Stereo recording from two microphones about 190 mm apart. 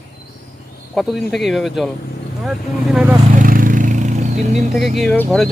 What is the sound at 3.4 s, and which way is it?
Vehicle, 45° right (ahead or behind).